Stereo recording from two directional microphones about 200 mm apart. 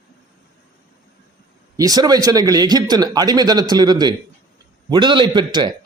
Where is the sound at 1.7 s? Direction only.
20° right (ahead or behind).